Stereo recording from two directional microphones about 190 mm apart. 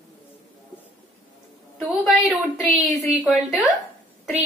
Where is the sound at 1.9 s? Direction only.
Centre (ahead or behind).